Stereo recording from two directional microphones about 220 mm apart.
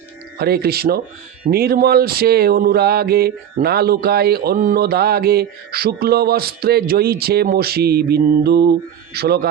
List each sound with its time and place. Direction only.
0.3 s mantra: 45° right (ahead or behind)